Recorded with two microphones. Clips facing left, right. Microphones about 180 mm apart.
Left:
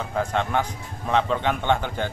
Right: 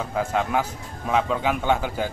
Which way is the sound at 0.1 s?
5° right (ahead or behind).